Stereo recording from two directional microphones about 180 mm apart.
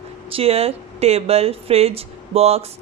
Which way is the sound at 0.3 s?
30° right (ahead or behind).